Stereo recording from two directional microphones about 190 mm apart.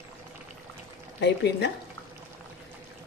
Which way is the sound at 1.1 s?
65° left (ahead or behind).